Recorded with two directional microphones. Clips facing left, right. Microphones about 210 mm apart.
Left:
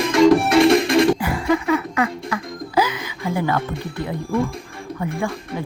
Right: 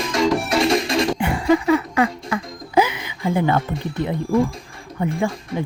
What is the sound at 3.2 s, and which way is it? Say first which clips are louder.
Speech: right 3 dB; 25° right (ahead or behind).